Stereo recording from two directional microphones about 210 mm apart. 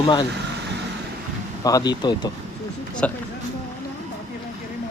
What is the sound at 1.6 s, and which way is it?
Speech, 20° left (ahead or behind).